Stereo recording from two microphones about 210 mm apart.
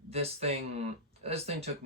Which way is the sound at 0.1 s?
30° right (ahead or behind).